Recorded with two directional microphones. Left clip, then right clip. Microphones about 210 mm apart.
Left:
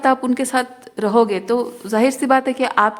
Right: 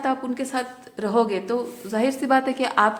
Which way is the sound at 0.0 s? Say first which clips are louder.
Left 8 dB; 40° left (ahead or behind).